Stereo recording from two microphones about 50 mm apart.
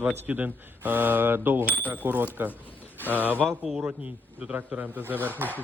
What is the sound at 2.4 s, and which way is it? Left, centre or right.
Speech, right.